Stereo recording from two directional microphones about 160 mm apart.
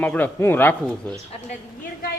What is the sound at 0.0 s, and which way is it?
Speech, 10° left (ahead or behind).